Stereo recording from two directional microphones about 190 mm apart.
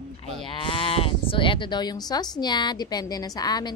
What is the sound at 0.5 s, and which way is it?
Speech, 25° left (ahead or behind).